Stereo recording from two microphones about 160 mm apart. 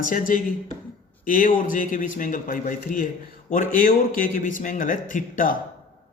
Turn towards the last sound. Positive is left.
turn(degrees=55)  # may be behind; listen again after turning